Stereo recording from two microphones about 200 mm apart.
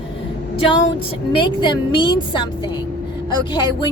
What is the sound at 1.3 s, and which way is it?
A woman's voice, 25° left (ahead or behind).